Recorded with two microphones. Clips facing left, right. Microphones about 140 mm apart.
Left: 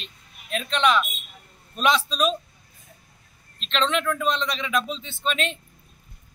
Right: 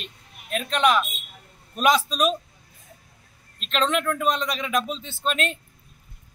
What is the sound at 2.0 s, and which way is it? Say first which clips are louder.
Speech: right 1 dB; 5° right (ahead or behind).